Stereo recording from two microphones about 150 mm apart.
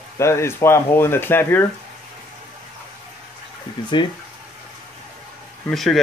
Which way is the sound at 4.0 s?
30° left (ahead or behind).